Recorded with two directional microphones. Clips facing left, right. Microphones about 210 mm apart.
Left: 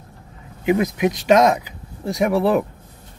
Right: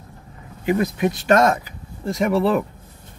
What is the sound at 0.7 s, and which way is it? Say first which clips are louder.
Speech: left 2 dB; 15° left (ahead or behind).